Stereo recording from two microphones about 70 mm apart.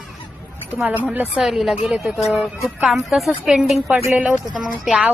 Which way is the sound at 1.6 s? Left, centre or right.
Centre.